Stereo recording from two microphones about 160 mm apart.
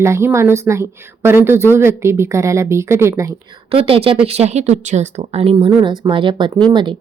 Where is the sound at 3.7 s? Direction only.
35° right (ahead or behind).